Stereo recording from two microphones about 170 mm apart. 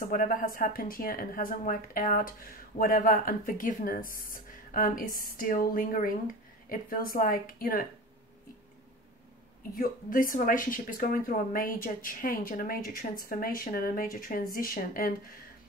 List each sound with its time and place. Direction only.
0.1 s speech: 55° left (ahead or behind)
9.8 s a woman's voice: 55° left (ahead or behind)